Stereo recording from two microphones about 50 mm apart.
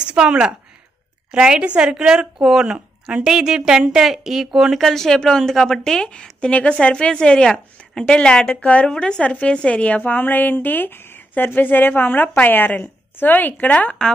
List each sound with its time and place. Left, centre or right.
0.0 s a woman's voice: centre
4.7 s a woman's voice: centre; by 8.8 s left
8.8 s a woman's voice: centre; by 13.9 s left